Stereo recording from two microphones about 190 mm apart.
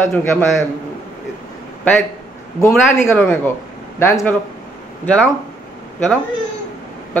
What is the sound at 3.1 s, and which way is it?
Speech, 10° left (ahead or behind).